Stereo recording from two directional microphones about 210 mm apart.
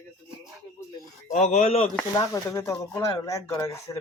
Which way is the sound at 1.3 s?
35° left (ahead or behind).